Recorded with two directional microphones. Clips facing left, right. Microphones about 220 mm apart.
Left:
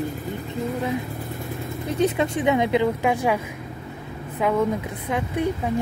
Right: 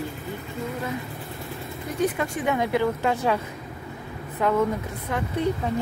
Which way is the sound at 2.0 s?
20° left (ahead or behind).